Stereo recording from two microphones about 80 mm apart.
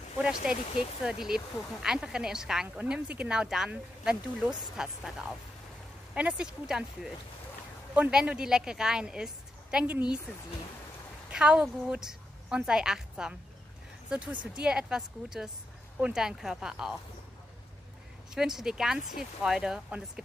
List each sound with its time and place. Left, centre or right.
0.2 s speech: centre
2.8 s speech: centre
6.1 s speech: centre
8.1 s a woman's voice: centre
11.2 s a woman's voice: centre
18.3 s speech: centre